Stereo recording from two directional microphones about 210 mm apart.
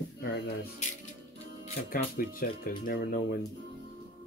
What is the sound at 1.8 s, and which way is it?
Speech, 45° left (ahead or behind).